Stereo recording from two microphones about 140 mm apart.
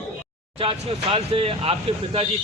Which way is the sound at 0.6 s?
40° right (ahead or behind).